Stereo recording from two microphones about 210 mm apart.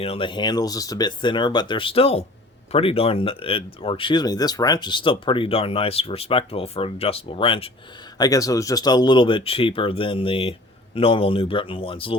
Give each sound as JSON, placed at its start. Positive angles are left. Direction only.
{"t": 0.0, "sound": "speech", "side_deg": 25}